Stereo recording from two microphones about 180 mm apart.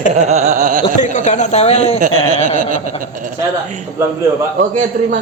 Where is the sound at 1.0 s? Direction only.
40° left (ahead or behind).